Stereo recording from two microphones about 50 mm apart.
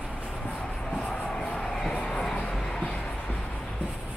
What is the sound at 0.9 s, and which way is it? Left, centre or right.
Music, centre.